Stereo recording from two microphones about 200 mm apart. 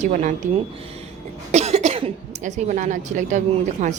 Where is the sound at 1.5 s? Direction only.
35° right (ahead or behind).